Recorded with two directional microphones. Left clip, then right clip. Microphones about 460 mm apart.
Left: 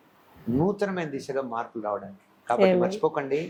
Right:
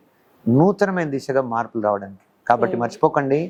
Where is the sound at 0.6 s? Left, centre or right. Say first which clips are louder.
Right 8 dB; right.